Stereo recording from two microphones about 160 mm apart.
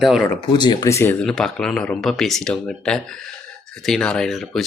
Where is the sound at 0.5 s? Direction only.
30° left (ahead or behind).